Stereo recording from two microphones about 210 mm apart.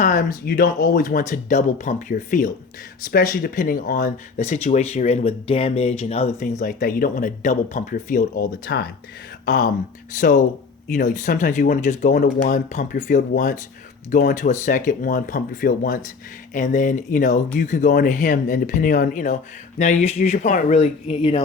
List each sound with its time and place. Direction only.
0.0 s speech: 40° left (ahead or behind)